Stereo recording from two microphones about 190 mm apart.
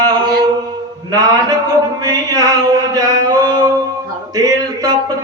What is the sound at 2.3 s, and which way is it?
Music, 20° right (ahead or behind).